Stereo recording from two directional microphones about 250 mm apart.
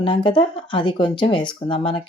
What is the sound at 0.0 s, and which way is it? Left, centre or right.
Speech, centre.